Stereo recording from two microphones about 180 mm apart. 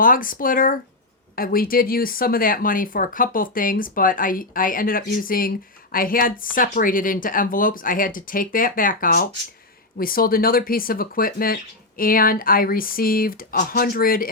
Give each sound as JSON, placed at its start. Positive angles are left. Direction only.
{"t": 0.0, "sound": "speech", "side_deg": 50}